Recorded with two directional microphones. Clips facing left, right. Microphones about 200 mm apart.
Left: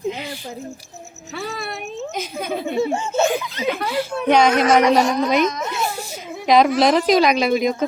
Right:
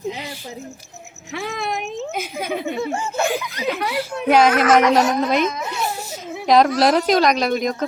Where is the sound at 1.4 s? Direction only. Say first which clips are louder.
Right 3 dB; 15° right (ahead or behind).